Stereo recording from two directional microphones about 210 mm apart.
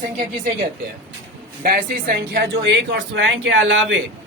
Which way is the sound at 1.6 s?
45° right (ahead or behind).